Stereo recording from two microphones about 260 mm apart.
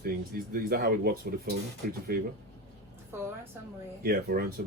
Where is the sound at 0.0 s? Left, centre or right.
Right.